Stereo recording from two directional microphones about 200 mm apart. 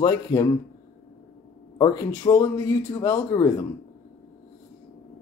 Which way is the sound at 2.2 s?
15° left (ahead or behind).